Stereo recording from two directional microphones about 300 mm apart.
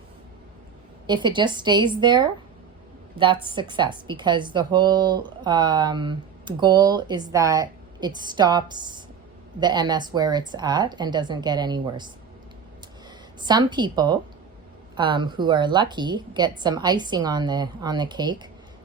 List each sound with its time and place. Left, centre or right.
1.0 s speech: centre
3.5 s speech: centre
13.4 s speech: centre